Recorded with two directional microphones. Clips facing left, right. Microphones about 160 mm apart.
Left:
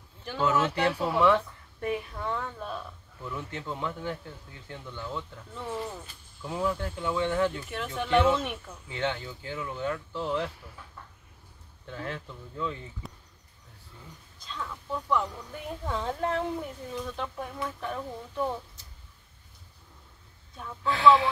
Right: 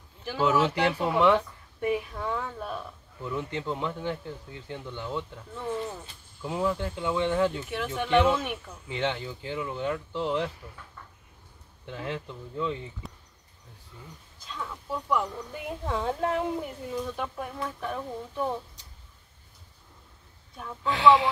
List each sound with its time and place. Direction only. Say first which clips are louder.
0.2 s speech: right 2 dB; 5° right (ahead or behind)
0.6 s speech: right 1 dB; 20° right (ahead or behind)
0.9 s speech: right 1 dB; centre (ahead or behind); by 5.2 s 15° right (ahead or behind)
5.5 s speech: right 2 dB; centre (ahead or behind)
6.4 s speech: right 2 dB; 15° right (ahead or behind)
7.7 s speech: right 1 dB; centre (ahead or behind)
8.8 s speech: right 1 dB; 15° right (ahead or behind)
11.9 s speech: right 2 dB; 10° right (ahead or behind)
13.0 s a sound: right 1 dB; centre (ahead or behind)
14.4 s speech: even; 10° right (ahead or behind)
20.5 s speech: even; 15° right (ahead or behind)